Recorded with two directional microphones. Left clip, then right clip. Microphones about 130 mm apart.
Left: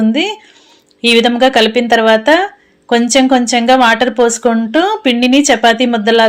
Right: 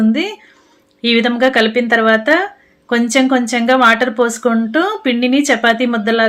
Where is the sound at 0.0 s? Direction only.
20° left (ahead or behind).